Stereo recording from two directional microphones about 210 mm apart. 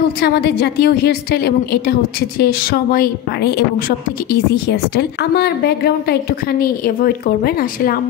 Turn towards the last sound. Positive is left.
turn(degrees=45)  # may be behind; listen again after turning